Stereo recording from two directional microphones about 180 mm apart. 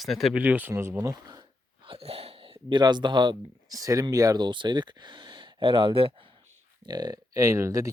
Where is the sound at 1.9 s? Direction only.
35° right (ahead or behind).